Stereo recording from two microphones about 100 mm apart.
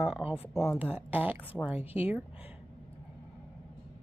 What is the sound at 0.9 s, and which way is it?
Speech, 15° right (ahead or behind).